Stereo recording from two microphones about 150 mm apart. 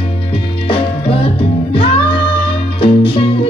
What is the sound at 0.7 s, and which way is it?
Music, 40° left (ahead or behind).